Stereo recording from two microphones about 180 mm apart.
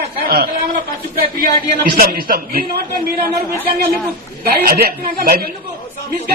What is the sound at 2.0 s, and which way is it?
Speech, 55° right (ahead or behind).